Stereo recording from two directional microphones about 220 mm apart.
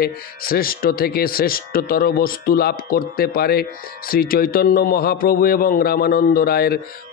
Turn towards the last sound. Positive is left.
turn(degrees=45)  # may be behind; listen again after turning